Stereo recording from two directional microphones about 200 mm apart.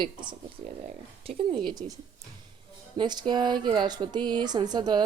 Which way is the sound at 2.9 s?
20° right (ahead or behind).